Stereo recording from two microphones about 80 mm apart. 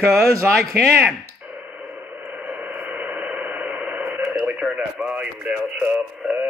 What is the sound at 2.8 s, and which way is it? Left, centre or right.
Radio, centre.